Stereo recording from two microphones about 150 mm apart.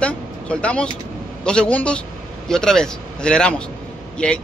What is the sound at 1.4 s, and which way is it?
A man's voice, 5° left (ahead or behind).